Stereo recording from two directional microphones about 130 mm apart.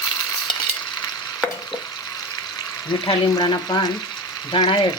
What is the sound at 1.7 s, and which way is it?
Frying, 30° left (ahead or behind).